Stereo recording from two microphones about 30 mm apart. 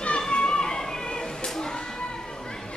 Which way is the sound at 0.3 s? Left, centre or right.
Left.